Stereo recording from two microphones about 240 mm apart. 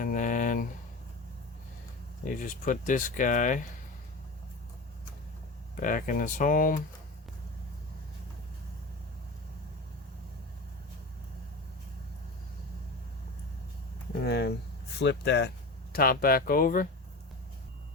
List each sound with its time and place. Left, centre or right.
0.0 s a sound: left
2.2 s speech: left
5.7 s speech: left
14.3 s speech: left